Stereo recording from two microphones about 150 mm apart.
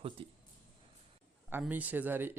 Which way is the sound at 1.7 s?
10° right (ahead or behind).